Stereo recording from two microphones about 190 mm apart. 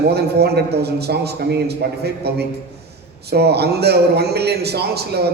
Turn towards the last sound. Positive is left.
turn(degrees=-60)  # may be behind; listen again after turning